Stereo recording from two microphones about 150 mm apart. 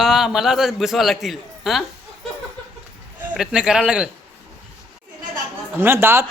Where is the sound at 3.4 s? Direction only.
5° right (ahead or behind).